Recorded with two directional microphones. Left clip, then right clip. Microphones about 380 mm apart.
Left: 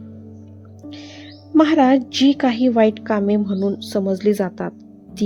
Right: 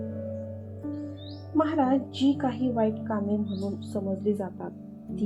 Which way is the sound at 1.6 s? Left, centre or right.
Left.